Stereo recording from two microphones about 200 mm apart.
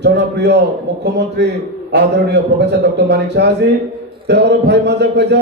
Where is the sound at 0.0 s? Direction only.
60° right (ahead or behind).